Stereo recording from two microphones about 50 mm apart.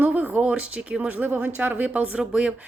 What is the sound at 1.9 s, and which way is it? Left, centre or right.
Speech, right.